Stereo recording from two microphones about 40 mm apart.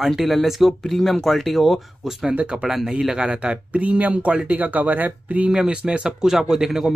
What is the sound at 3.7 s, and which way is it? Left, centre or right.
Speech, right.